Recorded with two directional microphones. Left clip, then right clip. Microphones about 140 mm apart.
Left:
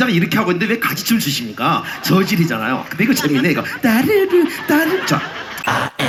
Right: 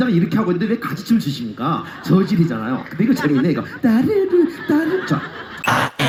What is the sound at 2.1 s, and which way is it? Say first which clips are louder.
A man's voice: left 1 dB; 15° right (ahead or behind).